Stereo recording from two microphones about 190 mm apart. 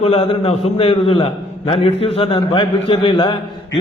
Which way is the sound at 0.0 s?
30° left (ahead or behind).